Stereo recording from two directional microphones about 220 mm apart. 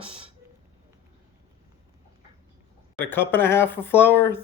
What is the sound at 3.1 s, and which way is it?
Speech, 10° left (ahead or behind).